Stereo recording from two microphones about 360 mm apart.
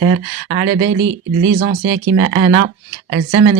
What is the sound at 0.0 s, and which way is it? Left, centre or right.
Speech, right.